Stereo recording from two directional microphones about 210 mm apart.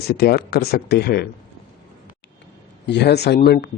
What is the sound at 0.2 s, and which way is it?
Speech, 50° left (ahead or behind).